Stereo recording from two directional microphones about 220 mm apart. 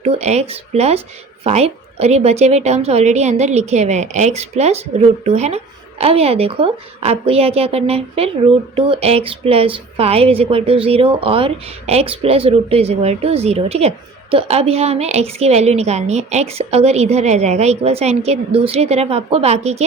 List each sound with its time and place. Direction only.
0.0 s a woman's voice: 30° right (ahead or behind)